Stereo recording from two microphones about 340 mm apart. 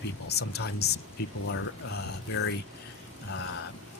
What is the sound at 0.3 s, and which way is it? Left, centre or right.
Speech, left.